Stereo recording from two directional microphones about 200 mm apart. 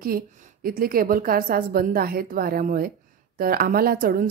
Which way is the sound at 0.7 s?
45° right (ahead or behind).